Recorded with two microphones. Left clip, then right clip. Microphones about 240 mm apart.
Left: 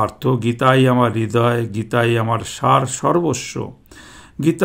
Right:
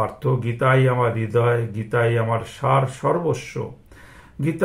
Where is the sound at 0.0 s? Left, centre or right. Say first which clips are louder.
Left 5 dB; left.